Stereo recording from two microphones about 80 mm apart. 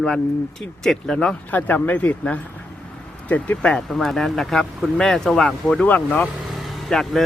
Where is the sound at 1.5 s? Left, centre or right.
Left.